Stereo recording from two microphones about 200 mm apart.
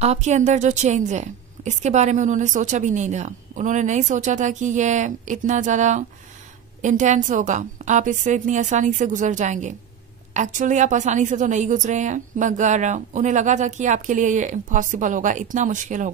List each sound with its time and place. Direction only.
0.0 s a woman's voice: 35° right (ahead or behind)